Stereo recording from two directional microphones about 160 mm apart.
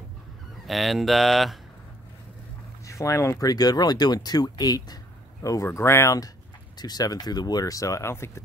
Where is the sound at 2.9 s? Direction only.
20° left (ahead or behind).